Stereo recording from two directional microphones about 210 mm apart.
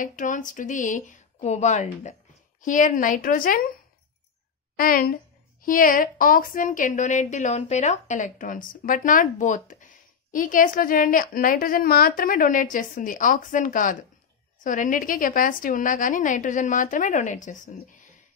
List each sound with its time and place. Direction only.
0.0 s a woman's voice: 40° left (ahead or behind)
4.7 s a woman's voice: 45° left (ahead or behind)